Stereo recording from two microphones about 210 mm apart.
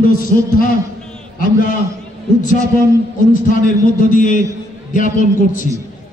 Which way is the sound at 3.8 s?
40° left (ahead or behind).